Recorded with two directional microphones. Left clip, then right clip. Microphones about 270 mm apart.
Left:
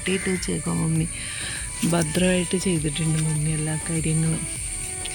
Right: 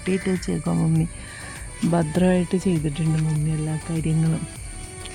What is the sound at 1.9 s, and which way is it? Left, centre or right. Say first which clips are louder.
Speech: right 1 dB; right.